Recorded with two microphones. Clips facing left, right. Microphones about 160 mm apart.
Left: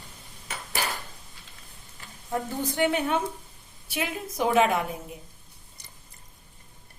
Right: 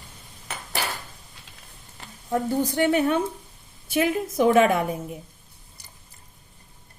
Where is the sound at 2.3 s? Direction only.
40° right (ahead or behind).